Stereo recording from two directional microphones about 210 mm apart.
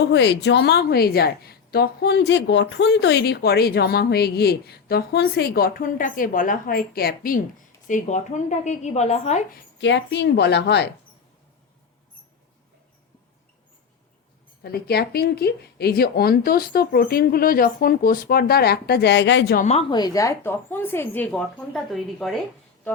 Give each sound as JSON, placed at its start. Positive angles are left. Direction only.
{"t": 0.0, "sound": "a woman's voice", "side_deg": 55}
{"t": 9.8, "sound": "a woman's voice", "side_deg": 60}
{"t": 14.6, "sound": "a woman's voice", "side_deg": 50}
{"t": 19.5, "sound": "a woman's voice", "side_deg": 30}